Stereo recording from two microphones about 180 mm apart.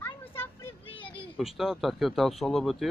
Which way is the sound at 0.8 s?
30° left (ahead or behind).